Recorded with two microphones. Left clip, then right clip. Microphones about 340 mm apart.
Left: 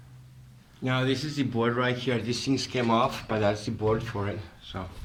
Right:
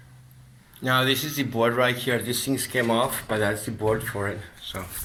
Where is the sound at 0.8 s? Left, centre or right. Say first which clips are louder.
Right 6 dB; centre.